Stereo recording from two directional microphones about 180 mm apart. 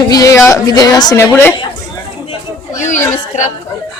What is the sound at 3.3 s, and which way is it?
Speech, 45° left (ahead or behind).